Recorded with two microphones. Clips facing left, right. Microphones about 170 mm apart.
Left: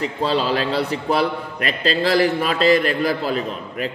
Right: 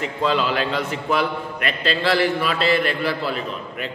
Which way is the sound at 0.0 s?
35° left (ahead or behind).